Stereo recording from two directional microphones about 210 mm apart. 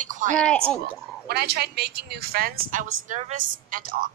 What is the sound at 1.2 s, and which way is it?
Speech, 50° right (ahead or behind).